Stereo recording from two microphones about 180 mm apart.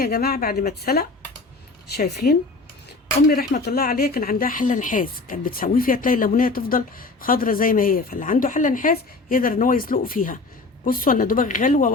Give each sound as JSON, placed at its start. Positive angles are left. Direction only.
{"t": 0.0, "sound": "a woman's voice", "side_deg": 60}